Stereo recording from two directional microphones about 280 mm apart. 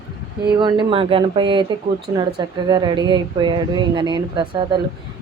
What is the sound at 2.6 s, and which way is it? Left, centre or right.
A woman's voice, centre.